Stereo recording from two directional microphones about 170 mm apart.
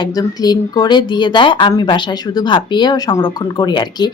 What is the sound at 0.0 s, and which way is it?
A woman's voice, 25° left (ahead or behind).